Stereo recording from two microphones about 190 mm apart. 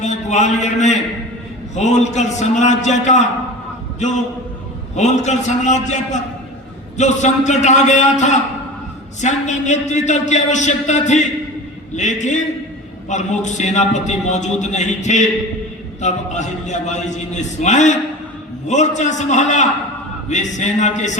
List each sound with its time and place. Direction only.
0.0 s a man's voice: 40° left (ahead or behind)
4.9 s a man's voice: 40° left (ahead or behind)